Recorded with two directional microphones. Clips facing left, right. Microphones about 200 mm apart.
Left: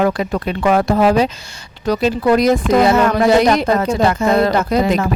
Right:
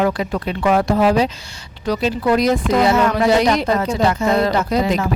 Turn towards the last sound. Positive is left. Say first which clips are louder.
# left 2 dB
turn(degrees=55)  # may be behind; listen again after turning